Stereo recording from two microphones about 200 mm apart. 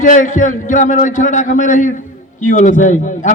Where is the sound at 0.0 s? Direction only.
40° left (ahead or behind).